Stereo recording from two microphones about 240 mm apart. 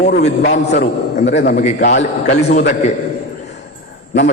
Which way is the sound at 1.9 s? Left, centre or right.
Left.